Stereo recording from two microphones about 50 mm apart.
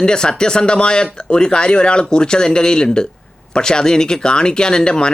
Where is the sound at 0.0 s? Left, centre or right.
Centre.